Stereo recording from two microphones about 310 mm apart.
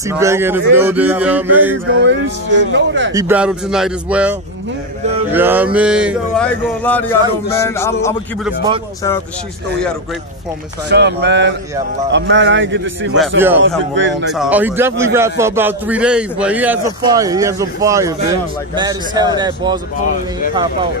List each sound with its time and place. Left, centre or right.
0.1 s a man's voice: centre
0.7 s a sound: centre
2.0 s speech: right
3.1 s a sound: centre
7.5 s a man's voice: centre
8.5 s a man's voice: centre
10.9 s speech: right
14.3 s a man's voice: centre